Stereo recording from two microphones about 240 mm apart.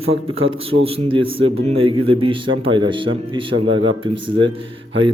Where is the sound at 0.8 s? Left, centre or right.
Right.